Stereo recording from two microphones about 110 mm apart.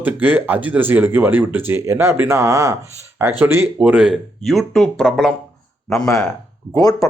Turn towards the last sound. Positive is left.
turn(degrees=35)  # may be behind; listen again after turning